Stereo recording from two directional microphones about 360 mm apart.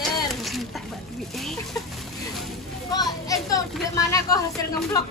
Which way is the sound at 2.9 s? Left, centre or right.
Centre.